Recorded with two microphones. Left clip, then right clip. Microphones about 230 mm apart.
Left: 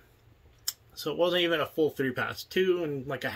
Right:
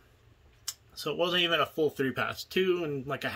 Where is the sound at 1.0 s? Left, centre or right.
Centre.